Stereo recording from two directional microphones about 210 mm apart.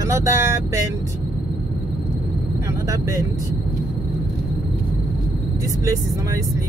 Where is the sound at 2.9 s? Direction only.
15° right (ahead or behind).